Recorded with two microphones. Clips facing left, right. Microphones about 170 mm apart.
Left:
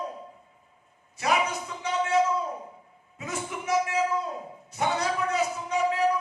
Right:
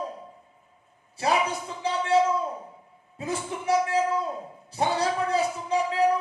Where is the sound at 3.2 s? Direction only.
30° right (ahead or behind).